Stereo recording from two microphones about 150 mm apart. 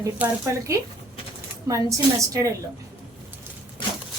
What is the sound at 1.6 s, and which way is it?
Speech, 20° right (ahead or behind).